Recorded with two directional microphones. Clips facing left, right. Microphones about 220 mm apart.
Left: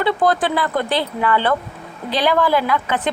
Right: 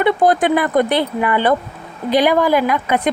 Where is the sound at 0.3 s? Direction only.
20° right (ahead or behind).